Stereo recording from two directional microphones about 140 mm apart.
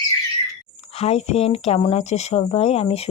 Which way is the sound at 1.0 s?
45° left (ahead or behind).